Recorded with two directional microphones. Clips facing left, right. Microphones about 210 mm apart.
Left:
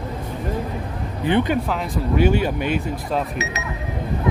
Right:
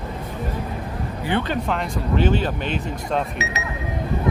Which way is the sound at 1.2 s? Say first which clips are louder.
Left 5 dB; 15° left (ahead or behind).